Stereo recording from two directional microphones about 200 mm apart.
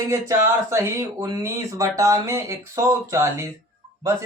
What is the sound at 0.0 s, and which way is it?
Speech, 15° right (ahead or behind).